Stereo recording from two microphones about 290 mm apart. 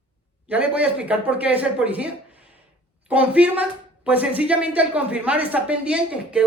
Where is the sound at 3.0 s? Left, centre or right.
Centre.